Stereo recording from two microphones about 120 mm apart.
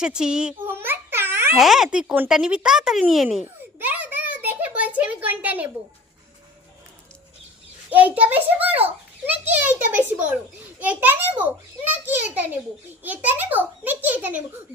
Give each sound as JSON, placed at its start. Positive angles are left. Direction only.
{"t": 0.0, "sound": "a child's voice", "side_deg": -5}
{"t": 0.7, "sound": "babbling", "side_deg": -20}
{"t": 1.5, "sound": "speech", "side_deg": 0}
{"t": 3.8, "sound": "a sound", "side_deg": -15}
{"t": 7.9, "sound": "a child's voice", "side_deg": -15}